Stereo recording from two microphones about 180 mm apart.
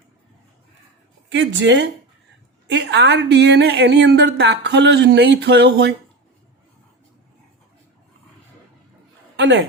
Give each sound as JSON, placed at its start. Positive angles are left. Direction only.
{"t": 1.3, "sound": "a woman's voice", "side_deg": -90}
{"t": 2.6, "sound": "speech", "side_deg": -70}
{"t": 9.3, "sound": "a sound", "side_deg": -85}